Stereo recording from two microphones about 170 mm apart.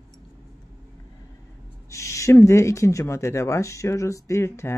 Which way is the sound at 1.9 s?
15° left (ahead or behind).